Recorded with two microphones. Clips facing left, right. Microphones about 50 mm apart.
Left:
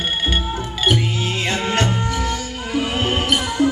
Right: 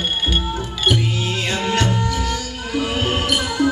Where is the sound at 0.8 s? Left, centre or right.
Left.